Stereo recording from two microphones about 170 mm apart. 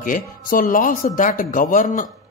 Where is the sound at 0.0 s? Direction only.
55° left (ahead or behind).